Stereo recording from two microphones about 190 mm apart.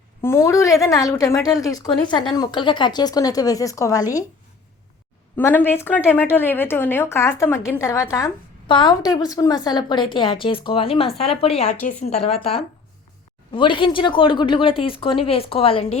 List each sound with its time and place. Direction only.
0.2 s a woman's voice: 15° left (ahead or behind)
5.4 s a woman's voice: 10° left (ahead or behind); by 16.0 s 30° left (ahead or behind)